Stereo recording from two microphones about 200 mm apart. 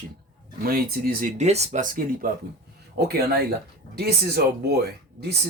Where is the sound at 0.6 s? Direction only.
50° right (ahead or behind).